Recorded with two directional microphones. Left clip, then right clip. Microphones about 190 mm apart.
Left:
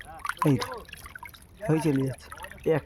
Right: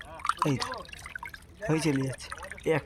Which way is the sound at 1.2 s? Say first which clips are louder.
Left 3 dB; 50° left (ahead or behind).